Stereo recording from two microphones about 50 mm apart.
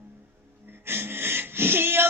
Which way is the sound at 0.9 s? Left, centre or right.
Right.